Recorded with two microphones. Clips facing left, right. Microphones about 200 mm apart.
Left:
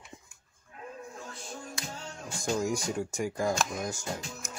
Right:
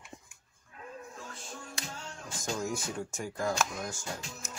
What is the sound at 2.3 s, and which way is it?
Speech, 15° left (ahead or behind).